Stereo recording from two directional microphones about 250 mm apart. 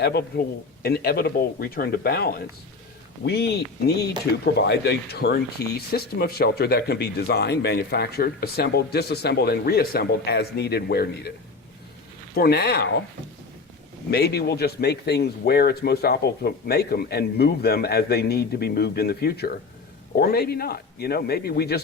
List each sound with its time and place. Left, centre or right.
0.0 s speech: left
12.4 s speech: left
14.1 s speech: left